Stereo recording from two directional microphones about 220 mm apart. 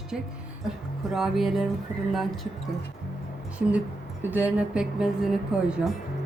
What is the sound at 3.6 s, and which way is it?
Speech, 5° right (ahead or behind).